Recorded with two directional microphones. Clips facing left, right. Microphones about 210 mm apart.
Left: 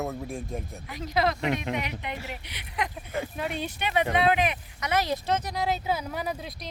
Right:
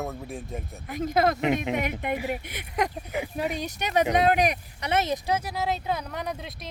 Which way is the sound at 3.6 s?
40° right (ahead or behind).